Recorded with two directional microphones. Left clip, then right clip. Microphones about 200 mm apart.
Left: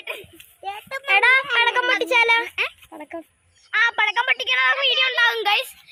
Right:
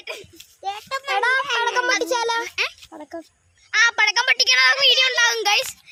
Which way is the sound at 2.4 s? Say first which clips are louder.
Even; 5° right (ahead or behind).